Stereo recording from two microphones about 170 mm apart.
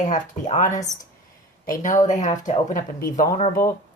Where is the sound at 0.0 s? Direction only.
45° left (ahead or behind).